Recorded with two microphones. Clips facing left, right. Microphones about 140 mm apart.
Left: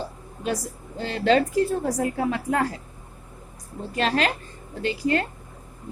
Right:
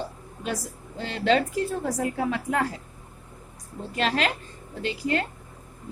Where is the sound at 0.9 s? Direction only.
40° left (ahead or behind).